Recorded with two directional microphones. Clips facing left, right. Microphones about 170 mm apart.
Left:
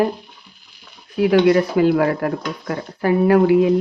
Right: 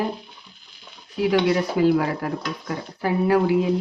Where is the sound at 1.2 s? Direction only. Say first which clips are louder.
Left 6 dB; 60° left (ahead or behind).